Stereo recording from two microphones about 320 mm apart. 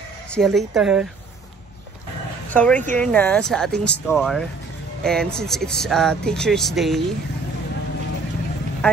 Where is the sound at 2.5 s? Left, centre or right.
Centre.